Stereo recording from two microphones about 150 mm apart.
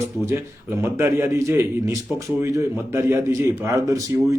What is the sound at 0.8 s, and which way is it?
A man's voice, 15° right (ahead or behind).